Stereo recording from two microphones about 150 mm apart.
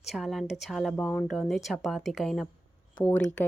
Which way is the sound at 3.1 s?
10° left (ahead or behind).